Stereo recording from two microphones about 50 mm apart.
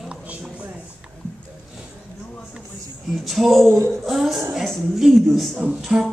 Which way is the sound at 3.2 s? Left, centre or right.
Centre.